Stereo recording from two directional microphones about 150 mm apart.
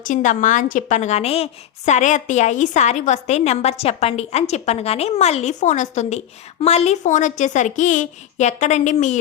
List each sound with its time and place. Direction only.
0.0 s a woman's voice: 55° left (ahead or behind)